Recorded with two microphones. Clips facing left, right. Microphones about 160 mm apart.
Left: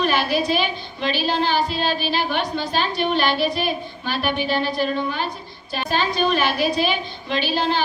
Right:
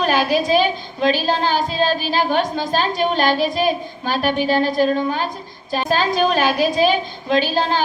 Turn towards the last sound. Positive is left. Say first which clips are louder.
# right 4 dB
turn(degrees=-45)  # may be behind; listen again after turning